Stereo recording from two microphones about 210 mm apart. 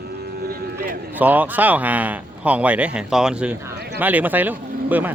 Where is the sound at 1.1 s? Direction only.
10° right (ahead or behind).